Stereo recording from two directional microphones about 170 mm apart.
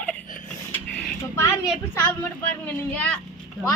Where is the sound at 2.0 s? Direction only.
10° left (ahead or behind).